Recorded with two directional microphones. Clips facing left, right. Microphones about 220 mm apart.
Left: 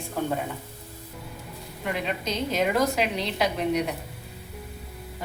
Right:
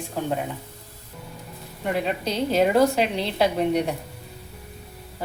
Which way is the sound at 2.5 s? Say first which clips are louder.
Right 6 dB; 30° right (ahead or behind).